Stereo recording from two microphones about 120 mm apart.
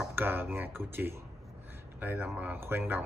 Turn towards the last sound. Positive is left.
turn(degrees=-20)  # may be behind; listen again after turning